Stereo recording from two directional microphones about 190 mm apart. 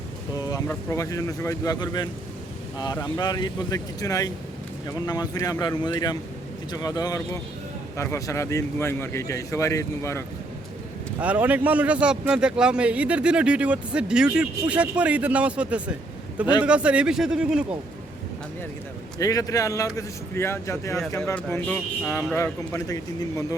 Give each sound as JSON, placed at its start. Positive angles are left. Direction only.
{"t": 0.4, "sound": "speech", "side_deg": 15}
{"t": 11.2, "sound": "a man's voice", "side_deg": -10}
{"t": 19.2, "sound": "speech", "side_deg": 20}